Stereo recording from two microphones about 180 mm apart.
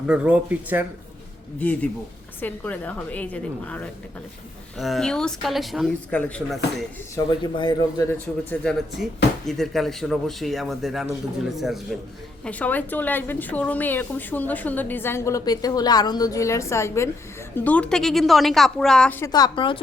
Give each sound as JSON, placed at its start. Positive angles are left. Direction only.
{"t": 0.1, "sound": "speech", "side_deg": -5}
{"t": 1.5, "sound": "a woman's voice", "side_deg": 10}
{"t": 7.5, "sound": "speech", "side_deg": 25}
{"t": 8.4, "sound": "a woman's voice", "side_deg": 5}
{"t": 19.2, "sound": "speech", "side_deg": 20}